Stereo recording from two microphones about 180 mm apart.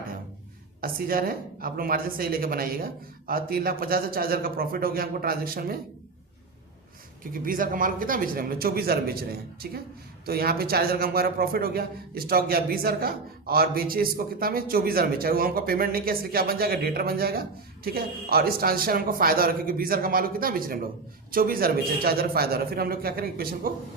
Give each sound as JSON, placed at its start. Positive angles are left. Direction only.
{"t": 0.8, "sound": "a man's voice", "side_deg": -55}
{"t": 7.3, "sound": "a man's voice", "side_deg": -50}
{"t": 10.2, "sound": "a man's voice", "side_deg": -60}